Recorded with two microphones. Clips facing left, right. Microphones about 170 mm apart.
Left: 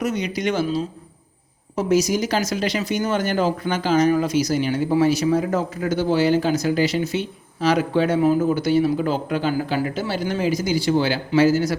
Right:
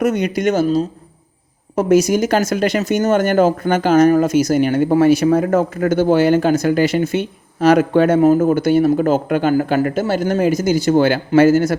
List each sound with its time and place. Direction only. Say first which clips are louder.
0.0 s speech: right 7 dB; 55° right (ahead or behind)